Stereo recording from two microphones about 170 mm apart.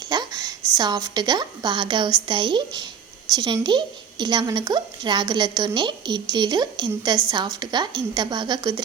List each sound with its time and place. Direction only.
0.1 s a woman's voice: 20° right (ahead or behind)